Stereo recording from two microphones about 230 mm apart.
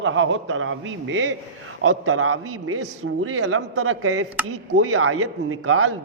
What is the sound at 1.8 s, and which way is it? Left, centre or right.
A man's voice, right.